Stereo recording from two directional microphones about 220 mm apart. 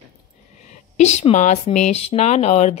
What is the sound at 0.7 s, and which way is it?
A woman's voice, 30° left (ahead or behind).